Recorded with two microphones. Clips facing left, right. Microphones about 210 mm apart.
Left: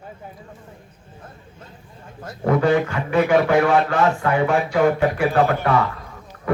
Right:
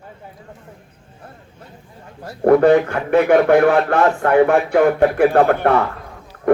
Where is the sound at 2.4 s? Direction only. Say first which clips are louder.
Right 6 dB; 60° right (ahead or behind).